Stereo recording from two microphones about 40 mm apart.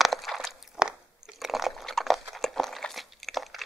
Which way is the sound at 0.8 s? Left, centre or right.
Right.